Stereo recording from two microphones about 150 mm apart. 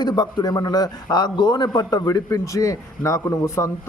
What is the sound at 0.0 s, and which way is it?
A man's voice, 30° left (ahead or behind).